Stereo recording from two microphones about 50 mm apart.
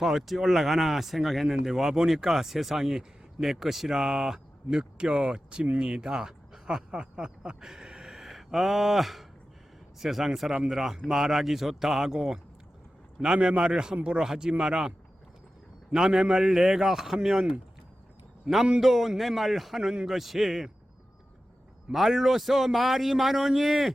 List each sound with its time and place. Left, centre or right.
0.0 s a man's voice: centre
21.9 s a man's voice: centre